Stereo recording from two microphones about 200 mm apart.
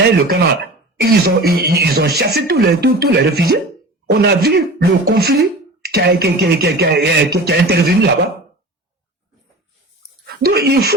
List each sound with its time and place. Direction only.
0.0 s speech: 50° right (ahead or behind)
10.2 s speech: 50° right (ahead or behind)